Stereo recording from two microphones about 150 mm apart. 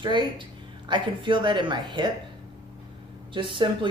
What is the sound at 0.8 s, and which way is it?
A woman's voice, 30° right (ahead or behind).